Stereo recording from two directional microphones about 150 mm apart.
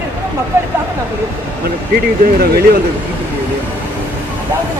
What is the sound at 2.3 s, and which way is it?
Speech, 90° right.